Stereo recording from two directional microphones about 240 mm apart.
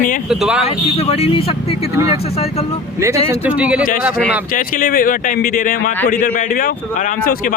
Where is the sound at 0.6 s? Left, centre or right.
Left.